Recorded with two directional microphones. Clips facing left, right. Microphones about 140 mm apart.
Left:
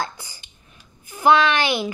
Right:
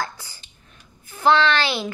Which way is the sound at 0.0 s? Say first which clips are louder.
Left 1 dB; 15° left (ahead or behind).